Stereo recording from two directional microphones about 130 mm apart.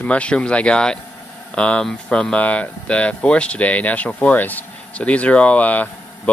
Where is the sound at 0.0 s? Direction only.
10° left (ahead or behind).